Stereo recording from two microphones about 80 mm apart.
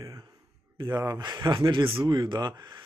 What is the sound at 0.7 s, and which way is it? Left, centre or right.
Speech, right.